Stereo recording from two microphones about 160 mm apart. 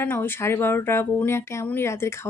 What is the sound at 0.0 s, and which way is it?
Speech, 15° left (ahead or behind).